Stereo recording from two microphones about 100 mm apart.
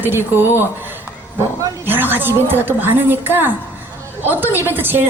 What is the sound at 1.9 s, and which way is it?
A woman's voice, 20° right (ahead or behind).